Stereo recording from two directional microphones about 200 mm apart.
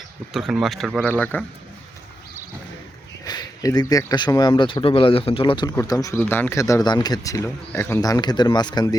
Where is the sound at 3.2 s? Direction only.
20° left (ahead or behind).